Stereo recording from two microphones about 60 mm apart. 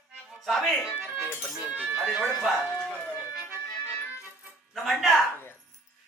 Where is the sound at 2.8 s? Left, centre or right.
Left.